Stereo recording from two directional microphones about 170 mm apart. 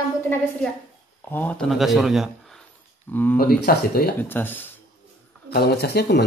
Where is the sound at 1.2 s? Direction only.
10° left (ahead or behind).